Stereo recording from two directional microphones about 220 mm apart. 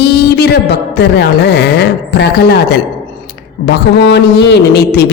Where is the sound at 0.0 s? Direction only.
50° left (ahead or behind).